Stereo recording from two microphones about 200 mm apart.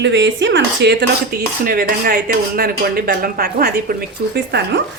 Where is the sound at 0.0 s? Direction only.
65° right (ahead or behind).